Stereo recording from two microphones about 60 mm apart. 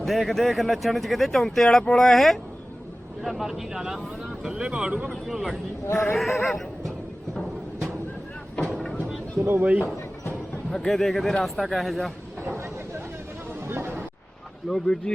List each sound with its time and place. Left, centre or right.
0.0 s speech: centre
5.3 s speech: centre
5.9 s speech: left
6.1 s speech: centre
7.3 s music: centre
9.4 s speech: right
9.6 s speech: right
10.7 s speech: centre
12.4 s a sound: right
14.7 s speech: centre